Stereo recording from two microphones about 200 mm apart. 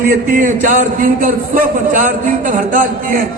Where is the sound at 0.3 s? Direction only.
40° right (ahead or behind).